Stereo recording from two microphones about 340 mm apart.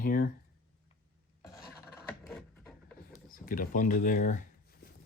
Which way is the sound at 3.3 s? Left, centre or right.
Left.